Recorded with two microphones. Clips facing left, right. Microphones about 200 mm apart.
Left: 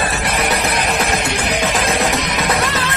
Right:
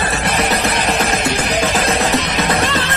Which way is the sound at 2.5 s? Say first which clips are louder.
Right 2 dB; 30° right (ahead or behind).